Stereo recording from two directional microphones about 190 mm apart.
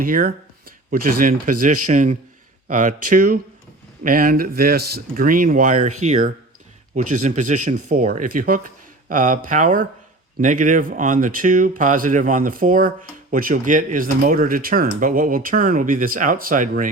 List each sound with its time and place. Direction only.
0.0 s speech: 50° right (ahead or behind)